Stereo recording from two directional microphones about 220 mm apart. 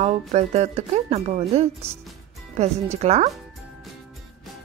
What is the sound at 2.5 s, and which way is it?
Speech, 30° right (ahead or behind).